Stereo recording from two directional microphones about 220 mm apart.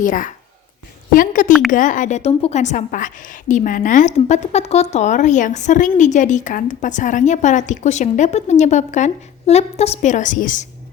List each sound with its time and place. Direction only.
0.0 s a woman's voice: 35° left (ahead or behind)